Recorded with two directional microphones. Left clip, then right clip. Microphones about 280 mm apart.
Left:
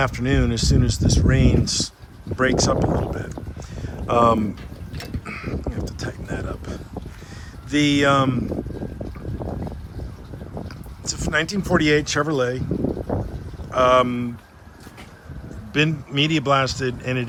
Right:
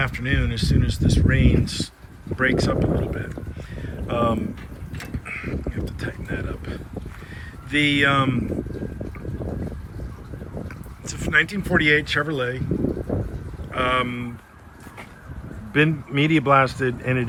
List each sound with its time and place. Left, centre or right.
0.0 s speech: centre
3.8 s a sound: centre
5.2 s speech: centre
10.6 s speech: centre
13.7 s speech: centre
15.7 s speech: centre